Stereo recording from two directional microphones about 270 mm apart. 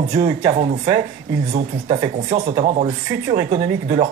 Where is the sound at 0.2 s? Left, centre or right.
Centre.